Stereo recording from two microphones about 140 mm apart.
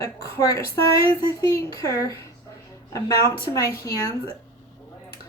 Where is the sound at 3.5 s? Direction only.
25° left (ahead or behind).